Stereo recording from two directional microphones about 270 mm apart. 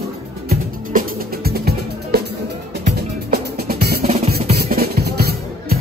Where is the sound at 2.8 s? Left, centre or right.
Right.